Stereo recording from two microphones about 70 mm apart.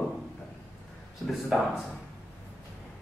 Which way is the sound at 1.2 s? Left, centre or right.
Centre.